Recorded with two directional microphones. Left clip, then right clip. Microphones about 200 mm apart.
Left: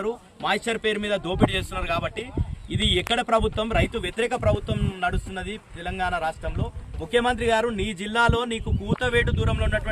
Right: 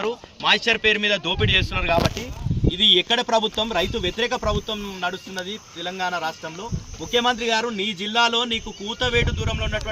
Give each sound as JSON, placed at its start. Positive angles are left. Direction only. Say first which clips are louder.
{"t": 0.4, "sound": "speech", "louder": "right 6 dB", "side_deg": 5}
{"t": 2.8, "sound": "speech", "louder": "right 6 dB", "side_deg": 30}